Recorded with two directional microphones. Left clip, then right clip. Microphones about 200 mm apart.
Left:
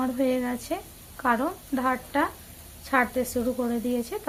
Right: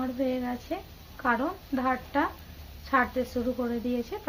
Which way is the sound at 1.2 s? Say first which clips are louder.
Left 2 dB; 20° left (ahead or behind).